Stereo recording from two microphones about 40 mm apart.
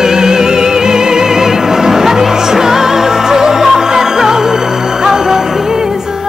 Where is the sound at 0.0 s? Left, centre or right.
Centre.